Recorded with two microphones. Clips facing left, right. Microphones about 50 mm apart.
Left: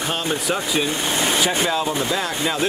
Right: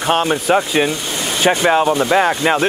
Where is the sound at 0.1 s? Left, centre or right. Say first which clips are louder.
Right 11 dB; right.